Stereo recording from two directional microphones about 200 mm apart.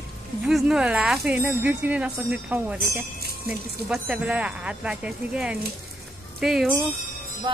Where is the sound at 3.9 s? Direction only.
5° right (ahead or behind).